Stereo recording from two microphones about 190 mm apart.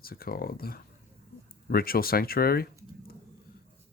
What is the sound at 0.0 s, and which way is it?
Speech, 50° left (ahead or behind).